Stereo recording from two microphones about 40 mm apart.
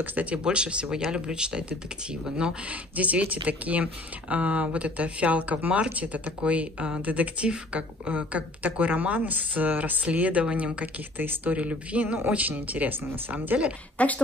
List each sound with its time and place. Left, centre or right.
0.0 s speech: right; by 2.5 s centre
2.7 s speech: right
11.1 s speech: right
11.5 s speech: right
12.9 s speech: right
13.9 s a woman's voice: left